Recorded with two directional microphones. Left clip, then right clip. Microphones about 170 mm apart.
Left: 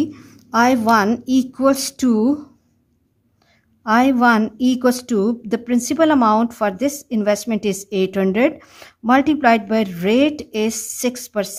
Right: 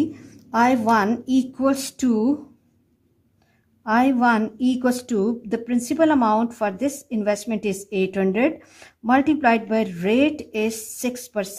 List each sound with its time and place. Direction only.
0.0 s a woman's voice: 30° left (ahead or behind)
3.8 s a woman's voice: 35° left (ahead or behind)